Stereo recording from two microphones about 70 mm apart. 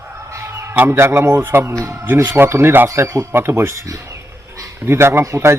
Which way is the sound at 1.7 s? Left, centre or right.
Right.